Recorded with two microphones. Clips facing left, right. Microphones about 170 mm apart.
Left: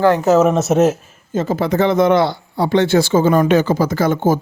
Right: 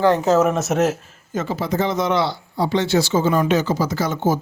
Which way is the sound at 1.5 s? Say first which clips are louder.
Left 6 dB; 60° left (ahead or behind).